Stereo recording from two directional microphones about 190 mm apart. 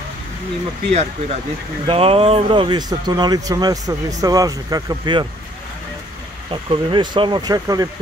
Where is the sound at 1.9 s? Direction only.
30° right (ahead or behind).